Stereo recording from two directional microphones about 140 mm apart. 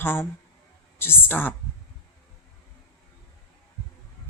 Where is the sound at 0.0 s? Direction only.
15° left (ahead or behind).